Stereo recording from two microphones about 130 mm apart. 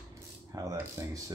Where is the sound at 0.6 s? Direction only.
25° right (ahead or behind).